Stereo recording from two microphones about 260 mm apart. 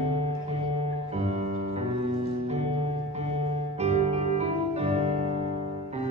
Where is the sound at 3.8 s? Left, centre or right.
Right.